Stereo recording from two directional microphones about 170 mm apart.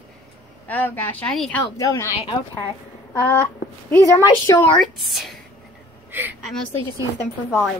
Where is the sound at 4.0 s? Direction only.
20° left (ahead or behind).